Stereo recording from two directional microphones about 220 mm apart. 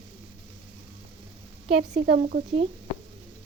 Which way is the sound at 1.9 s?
40° right (ahead or behind).